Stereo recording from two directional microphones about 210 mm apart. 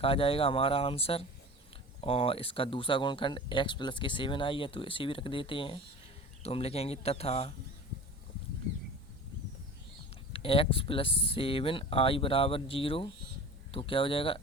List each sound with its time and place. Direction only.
0.0 s speech: 25° left (ahead or behind)
10.3 s speech: 25° left (ahead or behind)